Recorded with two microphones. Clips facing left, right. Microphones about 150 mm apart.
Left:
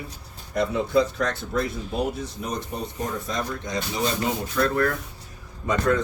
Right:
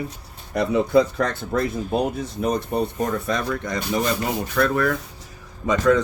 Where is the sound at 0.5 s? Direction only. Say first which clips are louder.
Right 4 dB; 65° right (ahead or behind).